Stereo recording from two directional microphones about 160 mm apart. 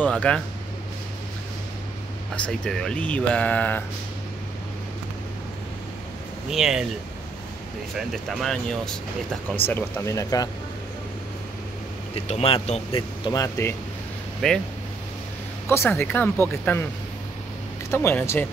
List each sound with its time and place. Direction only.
0.0 s speech: 5° left (ahead or behind)
2.3 s speech: 5° left (ahead or behind)
6.5 s speech: 5° right (ahead or behind)
7.9 s speech: centre (ahead or behind)
9.7 s speech: 15° left (ahead or behind)
12.3 s speech: 40° left (ahead or behind)
13.3 s speech: 20° left (ahead or behind)
14.4 s speech: 5° left (ahead or behind)
15.7 s speech: 15° left (ahead or behind)
17.9 s speech: 15° left (ahead or behind)